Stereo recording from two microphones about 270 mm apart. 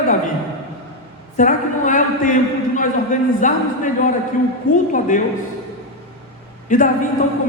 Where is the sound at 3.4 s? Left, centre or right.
Left.